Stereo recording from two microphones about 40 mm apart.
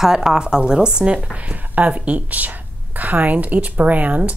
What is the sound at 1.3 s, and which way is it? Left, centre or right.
Speech, right.